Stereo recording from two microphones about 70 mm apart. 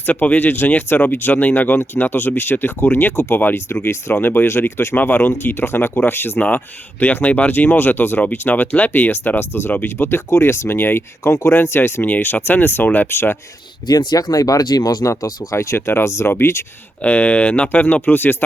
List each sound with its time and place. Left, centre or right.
0.0 s speech: left
11.2 s speech: left
11.5 s speech: left
13.8 s speech: left
17.0 s speech: left